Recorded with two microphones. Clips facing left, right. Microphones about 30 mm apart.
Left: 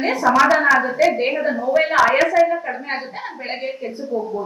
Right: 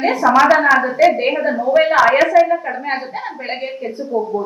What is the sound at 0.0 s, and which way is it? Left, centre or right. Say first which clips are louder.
A woman's voice: right 3 dB; centre.